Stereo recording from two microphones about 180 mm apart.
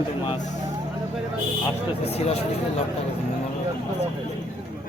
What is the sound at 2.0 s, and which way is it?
Speech, 35° left (ahead or behind).